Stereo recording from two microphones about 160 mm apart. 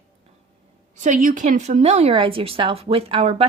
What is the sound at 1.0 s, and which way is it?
A woman's voice, 50° right (ahead or behind).